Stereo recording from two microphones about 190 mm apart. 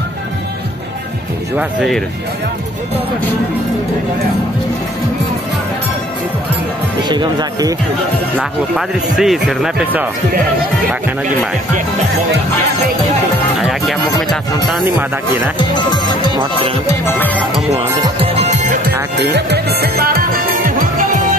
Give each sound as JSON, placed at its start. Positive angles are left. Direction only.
{"t": 1.6, "sound": "speech", "side_deg": 0}
{"t": 7.1, "sound": "speech", "side_deg": -20}
{"t": 8.4, "sound": "speech", "side_deg": -5}
{"t": 13.6, "sound": "speech", "side_deg": 0}
{"t": 15.7, "sound": "speech", "side_deg": 25}
{"t": 17.0, "sound": "music", "side_deg": 10}
{"t": 18.2, "sound": "music", "side_deg": -35}
{"t": 19.1, "sound": "music", "side_deg": -60}